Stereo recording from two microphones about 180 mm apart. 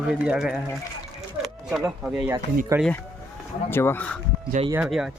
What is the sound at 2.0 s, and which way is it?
Speech, 5° right (ahead or behind).